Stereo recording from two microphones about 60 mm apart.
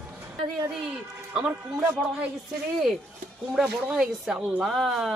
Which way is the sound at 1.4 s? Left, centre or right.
Right.